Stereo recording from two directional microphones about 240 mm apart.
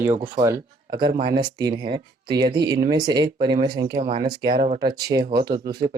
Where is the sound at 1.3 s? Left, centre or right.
Centre.